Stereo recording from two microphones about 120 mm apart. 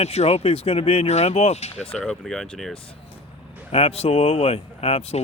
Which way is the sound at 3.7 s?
55° left (ahead or behind).